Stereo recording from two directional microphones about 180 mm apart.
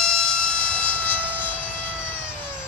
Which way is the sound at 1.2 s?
10° right (ahead or behind).